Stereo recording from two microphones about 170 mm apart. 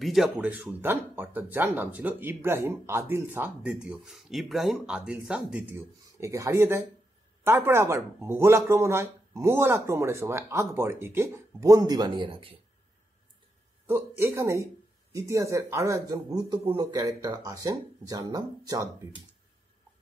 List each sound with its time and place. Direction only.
0.0 s speech: centre (ahead or behind); by 12.5 s 30° right (ahead or behind)
13.8 s speech: 15° right (ahead or behind)